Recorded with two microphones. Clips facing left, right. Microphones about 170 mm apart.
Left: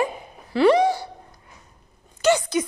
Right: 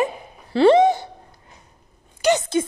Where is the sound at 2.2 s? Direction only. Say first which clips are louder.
Right 1 dB; 20° right (ahead or behind).